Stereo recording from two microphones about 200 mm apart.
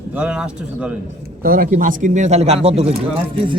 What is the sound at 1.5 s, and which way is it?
Speech, 45° right (ahead or behind).